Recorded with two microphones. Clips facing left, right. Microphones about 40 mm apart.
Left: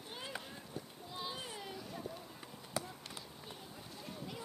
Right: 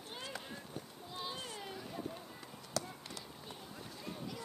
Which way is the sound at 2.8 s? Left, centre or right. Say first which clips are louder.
Right 1 dB; left.